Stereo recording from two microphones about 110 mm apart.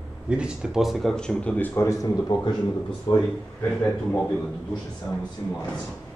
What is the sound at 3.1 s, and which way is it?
Speech, 50° left (ahead or behind).